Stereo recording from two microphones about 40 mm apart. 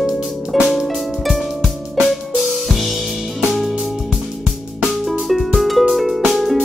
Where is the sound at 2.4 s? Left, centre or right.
Centre.